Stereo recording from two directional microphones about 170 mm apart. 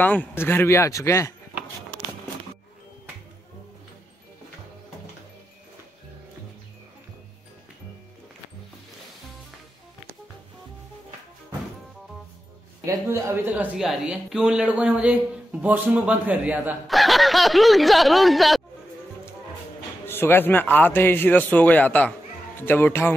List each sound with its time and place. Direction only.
0.0 s a man's voice: 10° left (ahead or behind)
12.8 s speech: 15° right (ahead or behind); by 18.6 s centre (ahead or behind)
20.1 s a man's voice: 15° left (ahead or behind)